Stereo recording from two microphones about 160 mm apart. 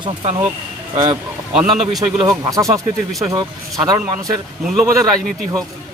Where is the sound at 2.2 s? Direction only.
20° right (ahead or behind).